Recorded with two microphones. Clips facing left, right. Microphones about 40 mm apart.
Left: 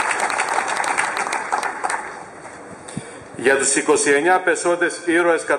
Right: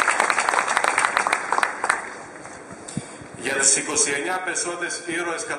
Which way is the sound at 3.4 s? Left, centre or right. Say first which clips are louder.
Left 8 dB; centre.